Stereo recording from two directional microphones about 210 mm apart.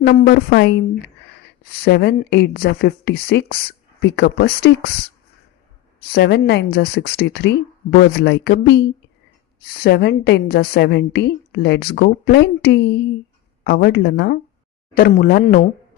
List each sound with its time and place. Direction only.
0.0 s a woman's voice: 45° left (ahead or behind)
6.1 s a woman's voice: 50° left (ahead or behind)